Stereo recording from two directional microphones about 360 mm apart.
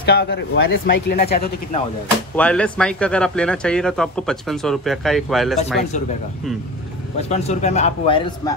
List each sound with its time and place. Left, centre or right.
0.0 s speech: left
2.3 s speech: centre
7.2 s speech: centre